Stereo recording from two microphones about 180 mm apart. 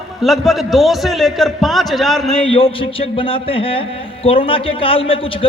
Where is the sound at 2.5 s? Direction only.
30° left (ahead or behind).